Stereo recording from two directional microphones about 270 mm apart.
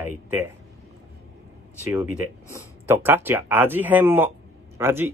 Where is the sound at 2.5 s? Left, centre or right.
Centre.